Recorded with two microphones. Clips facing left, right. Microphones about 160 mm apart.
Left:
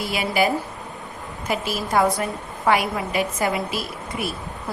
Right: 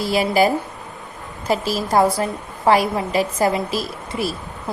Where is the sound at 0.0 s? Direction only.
35° right (ahead or behind).